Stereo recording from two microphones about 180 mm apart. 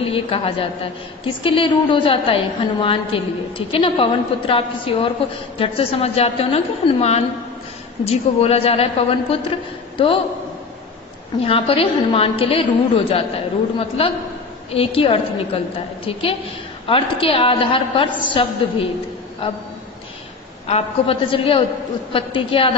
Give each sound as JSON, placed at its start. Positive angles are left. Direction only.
{"t": 0.0, "sound": "a woman's voice", "side_deg": 30}
{"t": 11.4, "sound": "a woman's voice", "side_deg": 30}
{"t": 20.6, "sound": "a woman's voice", "side_deg": 35}